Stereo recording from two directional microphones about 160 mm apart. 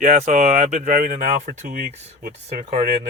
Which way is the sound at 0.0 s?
45° right (ahead or behind).